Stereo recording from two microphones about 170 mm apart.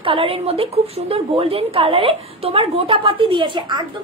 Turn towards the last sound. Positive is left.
turn(degrees=-25)  # may be behind; listen again after turning